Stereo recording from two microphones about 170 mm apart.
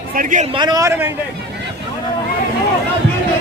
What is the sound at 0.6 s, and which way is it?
Speech, 20° right (ahead or behind).